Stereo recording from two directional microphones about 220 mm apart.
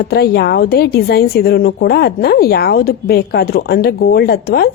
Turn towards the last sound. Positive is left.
turn(degrees=45)  # may be behind; listen again after turning